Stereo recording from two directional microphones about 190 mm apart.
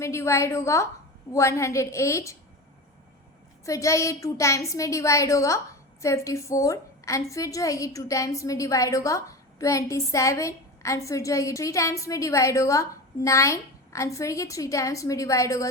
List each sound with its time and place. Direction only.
0.0 s a woman's voice: 15° left (ahead or behind)
3.7 s a woman's voice: 15° left (ahead or behind)